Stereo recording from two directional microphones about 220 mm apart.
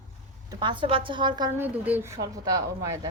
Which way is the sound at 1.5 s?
10° right (ahead or behind).